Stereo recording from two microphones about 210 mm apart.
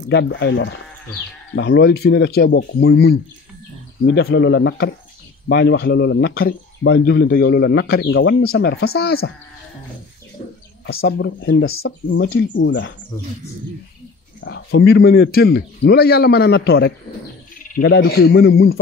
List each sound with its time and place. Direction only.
0.1 s a man's voice: 55° left (ahead or behind)
10.9 s a man's voice: 50° left (ahead or behind)
11.8 s speech: 65° left (ahead or behind)
14.4 s a man's voice: 55° left (ahead or behind)